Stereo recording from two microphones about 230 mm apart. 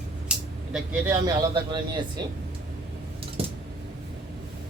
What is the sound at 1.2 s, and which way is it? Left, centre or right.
Speech, centre.